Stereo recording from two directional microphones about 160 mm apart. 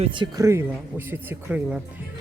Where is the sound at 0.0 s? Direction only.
30° right (ahead or behind).